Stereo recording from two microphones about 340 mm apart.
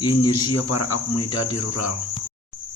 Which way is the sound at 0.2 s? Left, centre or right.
Left.